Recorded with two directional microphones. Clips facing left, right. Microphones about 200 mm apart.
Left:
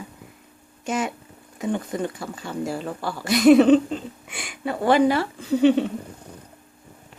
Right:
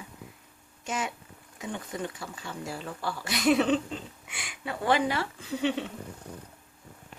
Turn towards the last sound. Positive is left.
turn(degrees=40)  # may be behind; listen again after turning